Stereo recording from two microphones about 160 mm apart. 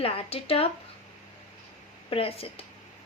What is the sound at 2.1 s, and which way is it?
Speech, 35° left (ahead or behind).